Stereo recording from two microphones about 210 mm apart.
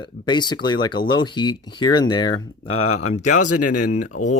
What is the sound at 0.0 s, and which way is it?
Speech, 20° left (ahead or behind).